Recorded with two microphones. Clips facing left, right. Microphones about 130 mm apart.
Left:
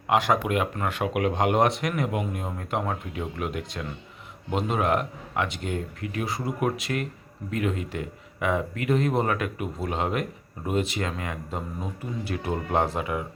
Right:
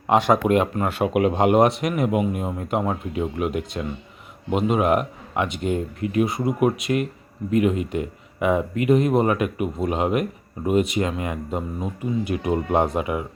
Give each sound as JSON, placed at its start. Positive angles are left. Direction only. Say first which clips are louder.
{"t": 0.1, "sound": "speech", "louder": "right 5 dB", "side_deg": -20}